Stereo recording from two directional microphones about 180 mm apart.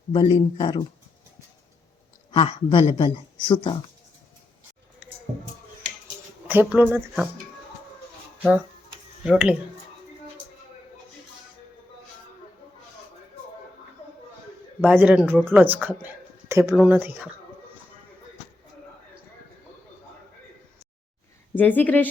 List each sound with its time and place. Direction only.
0.1 s speech: 30° left (ahead or behind)
2.3 s speech: 30° left (ahead or behind)
6.5 s speech: 10° right (ahead or behind)
9.2 s speech: 5° right (ahead or behind)
14.8 s speech: 10° right (ahead or behind)
21.5 s speech: 10° left (ahead or behind)